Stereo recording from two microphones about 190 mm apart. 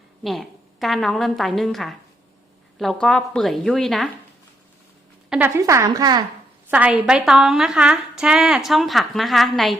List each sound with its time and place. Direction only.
0.2 s a woman's voice: centre (ahead or behind)
5.3 s a woman's voice: 10° right (ahead or behind)
6.7 s a woman's voice: 5° right (ahead or behind)